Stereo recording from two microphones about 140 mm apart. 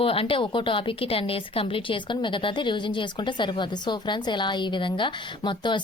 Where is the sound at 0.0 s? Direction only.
40° left (ahead or behind).